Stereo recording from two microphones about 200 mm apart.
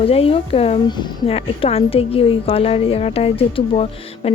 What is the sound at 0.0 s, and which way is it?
A woman's voice, 30° left (ahead or behind).